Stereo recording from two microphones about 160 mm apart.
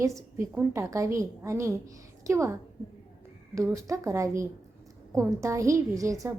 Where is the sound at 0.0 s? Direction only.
20° right (ahead or behind).